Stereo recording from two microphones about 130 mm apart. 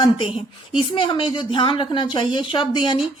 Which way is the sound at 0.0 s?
45° left (ahead or behind).